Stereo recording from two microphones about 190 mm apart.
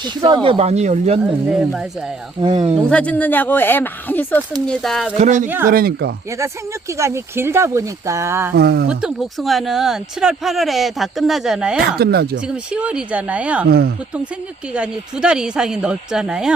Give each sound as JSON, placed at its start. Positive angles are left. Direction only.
{"t": 0.0, "sound": "speech", "side_deg": -25}
{"t": 1.5, "sound": "speech", "side_deg": 0}
{"t": 2.4, "sound": "speech", "side_deg": -25}
{"t": 2.9, "sound": "speech", "side_deg": 5}
{"t": 5.2, "sound": "speech", "side_deg": -40}
{"t": 5.6, "sound": "speech", "side_deg": -50}
{"t": 6.9, "sound": "speech", "side_deg": -15}
{"t": 8.5, "sound": "speech", "side_deg": -60}
{"t": 8.9, "sound": "speech", "side_deg": -5}
{"t": 11.8, "sound": "speech", "side_deg": -55}
{"t": 12.5, "sound": "speech", "side_deg": -5}
{"t": 13.7, "sound": "speech", "side_deg": -55}
{"t": 14.7, "sound": "speech", "side_deg": -5}